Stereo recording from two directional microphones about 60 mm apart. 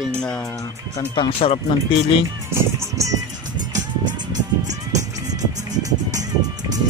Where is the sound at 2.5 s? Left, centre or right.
Right.